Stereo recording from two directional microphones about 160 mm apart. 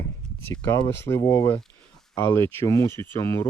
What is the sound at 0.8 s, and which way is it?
Speech, 15° left (ahead or behind).